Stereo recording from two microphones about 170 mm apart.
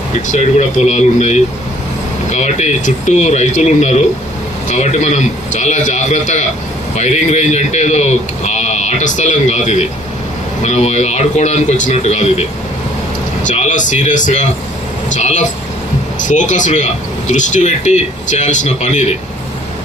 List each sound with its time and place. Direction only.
0.3 s speech: 40° left (ahead or behind)